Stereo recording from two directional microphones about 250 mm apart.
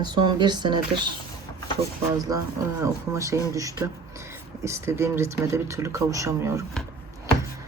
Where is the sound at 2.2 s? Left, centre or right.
Centre.